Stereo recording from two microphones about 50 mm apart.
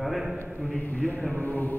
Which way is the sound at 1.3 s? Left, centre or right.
Left.